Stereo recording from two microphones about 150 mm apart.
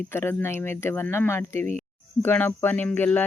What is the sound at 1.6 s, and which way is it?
Speech, 50° right (ahead or behind).